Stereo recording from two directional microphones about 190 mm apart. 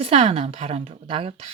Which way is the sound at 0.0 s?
35° right (ahead or behind).